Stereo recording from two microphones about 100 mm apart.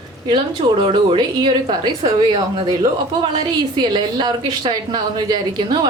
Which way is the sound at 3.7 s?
45° right (ahead or behind).